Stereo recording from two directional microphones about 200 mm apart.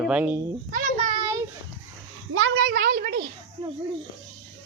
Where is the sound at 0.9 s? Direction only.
25° right (ahead or behind).